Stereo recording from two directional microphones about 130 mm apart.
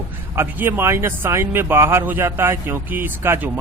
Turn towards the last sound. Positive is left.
turn(degrees=-15)  # may be behind; listen again after turning